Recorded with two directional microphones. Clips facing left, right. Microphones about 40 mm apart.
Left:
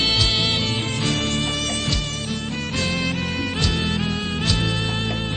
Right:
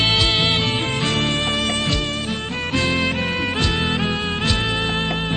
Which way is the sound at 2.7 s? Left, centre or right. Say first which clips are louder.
Right 5 dB; right.